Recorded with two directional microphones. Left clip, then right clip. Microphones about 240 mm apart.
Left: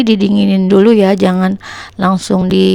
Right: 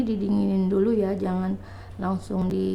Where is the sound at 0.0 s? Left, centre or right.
Left.